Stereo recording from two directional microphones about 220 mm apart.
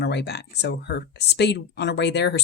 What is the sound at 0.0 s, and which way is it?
Speech, 50° left (ahead or behind).